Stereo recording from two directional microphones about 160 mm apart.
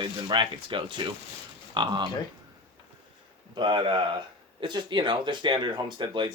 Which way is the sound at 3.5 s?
30° right (ahead or behind).